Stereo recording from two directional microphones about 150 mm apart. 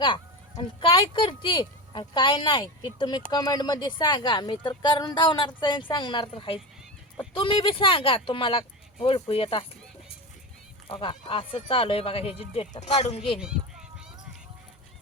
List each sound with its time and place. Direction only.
0.0 s speech: 30° left (ahead or behind)
10.8 s speech: 35° left (ahead or behind)